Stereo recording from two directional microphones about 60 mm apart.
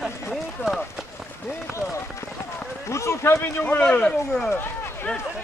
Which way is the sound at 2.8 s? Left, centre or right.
Left.